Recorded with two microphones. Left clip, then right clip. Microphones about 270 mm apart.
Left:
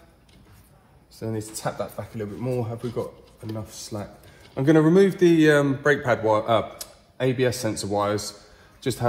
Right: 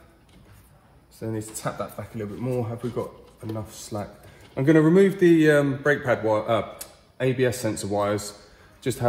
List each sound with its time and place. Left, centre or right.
1.2 s a man's voice: centre
7.2 s speech: centre